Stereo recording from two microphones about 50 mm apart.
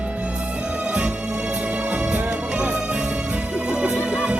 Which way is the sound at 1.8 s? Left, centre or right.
Right.